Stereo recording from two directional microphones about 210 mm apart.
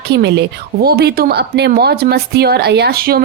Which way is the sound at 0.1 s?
55° right (ahead or behind).